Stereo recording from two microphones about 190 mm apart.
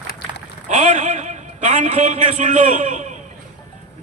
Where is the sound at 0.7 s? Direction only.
40° right (ahead or behind).